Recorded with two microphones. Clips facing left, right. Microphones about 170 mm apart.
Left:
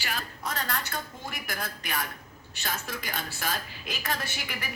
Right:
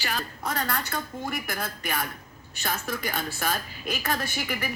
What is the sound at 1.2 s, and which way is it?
Speech, 50° right (ahead or behind).